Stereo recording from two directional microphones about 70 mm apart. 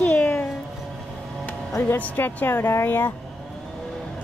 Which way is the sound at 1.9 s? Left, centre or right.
Left.